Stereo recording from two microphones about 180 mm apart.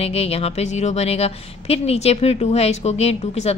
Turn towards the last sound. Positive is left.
turn(degrees=35)  # may be behind; listen again after turning